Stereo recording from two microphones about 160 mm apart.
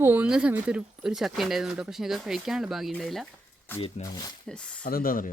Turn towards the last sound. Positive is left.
turn(degrees=60)  # may be behind; listen again after turning